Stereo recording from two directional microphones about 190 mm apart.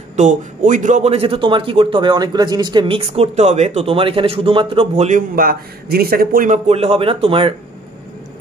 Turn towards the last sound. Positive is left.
turn(degrees=-30)  # may be behind; listen again after turning